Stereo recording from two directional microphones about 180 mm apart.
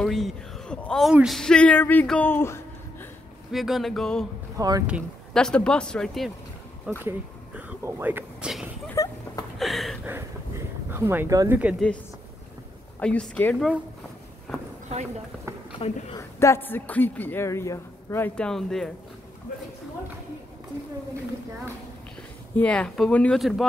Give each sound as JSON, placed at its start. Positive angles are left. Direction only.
{"t": 0.0, "sound": "speech", "side_deg": 0}
{"t": 3.5, "sound": "speech", "side_deg": 0}
{"t": 4.6, "sound": "speech", "side_deg": -20}
{"t": 5.3, "sound": "speech", "side_deg": 5}
{"t": 6.9, "sound": "a sound", "side_deg": -10}
{"t": 8.9, "sound": "a sound", "side_deg": 20}
{"t": 9.6, "sound": "a sound", "side_deg": 0}
{"t": 10.0, "sound": "a sound", "side_deg": -10}
{"t": 13.0, "sound": "speech", "side_deg": 5}
{"t": 15.8, "sound": "speech", "side_deg": 35}
{"t": 16.2, "sound": "speech", "side_deg": 15}
{"t": 22.6, "sound": "speech", "side_deg": 5}